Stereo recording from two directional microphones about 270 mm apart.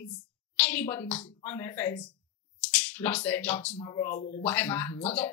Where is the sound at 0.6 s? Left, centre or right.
Centre.